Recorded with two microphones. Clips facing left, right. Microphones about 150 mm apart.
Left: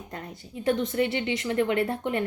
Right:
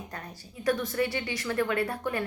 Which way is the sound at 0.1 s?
20° left (ahead or behind).